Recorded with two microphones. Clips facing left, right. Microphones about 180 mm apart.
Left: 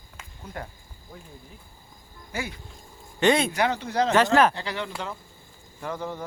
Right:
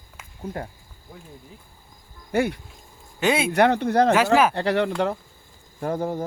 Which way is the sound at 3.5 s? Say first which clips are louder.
Right 7 dB; 60° right (ahead or behind).